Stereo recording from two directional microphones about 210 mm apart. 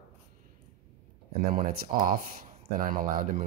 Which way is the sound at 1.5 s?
40° right (ahead or behind).